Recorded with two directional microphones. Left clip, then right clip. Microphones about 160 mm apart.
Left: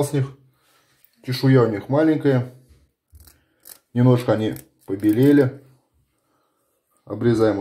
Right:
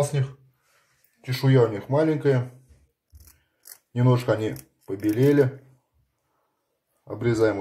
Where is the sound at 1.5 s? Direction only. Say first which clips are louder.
Left 3 dB; 30° left (ahead or behind).